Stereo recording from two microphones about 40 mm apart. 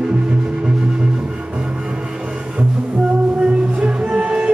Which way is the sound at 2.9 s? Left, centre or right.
Right.